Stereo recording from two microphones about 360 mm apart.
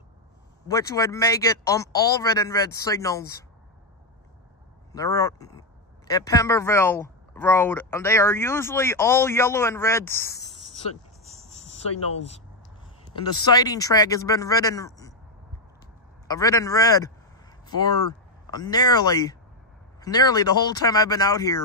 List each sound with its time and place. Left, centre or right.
0.7 s speech: centre
4.9 s speech: centre
11.2 s a sound: centre
11.5 s speech: centre
16.3 s speech: centre
18.5 s speech: centre